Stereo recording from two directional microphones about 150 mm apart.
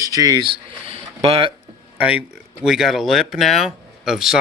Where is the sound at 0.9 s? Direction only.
40° right (ahead or behind).